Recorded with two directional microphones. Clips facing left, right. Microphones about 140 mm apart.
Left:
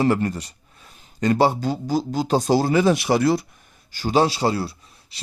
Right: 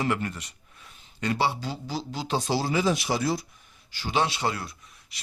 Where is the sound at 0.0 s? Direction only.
35° left (ahead or behind); by 3.4 s 65° left (ahead or behind).